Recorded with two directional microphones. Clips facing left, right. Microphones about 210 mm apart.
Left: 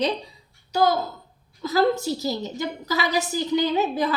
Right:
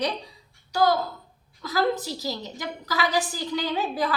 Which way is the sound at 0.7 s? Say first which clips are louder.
Left 1 dB; 25° left (ahead or behind).